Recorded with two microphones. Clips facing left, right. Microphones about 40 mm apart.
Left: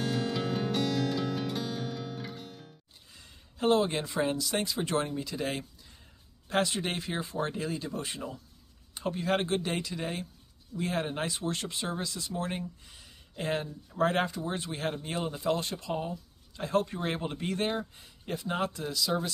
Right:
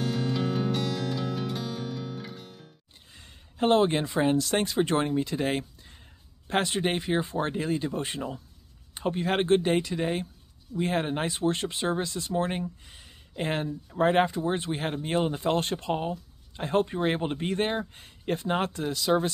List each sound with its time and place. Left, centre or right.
0.0 s music: centre
3.2 s speech: right
17.9 s speech: right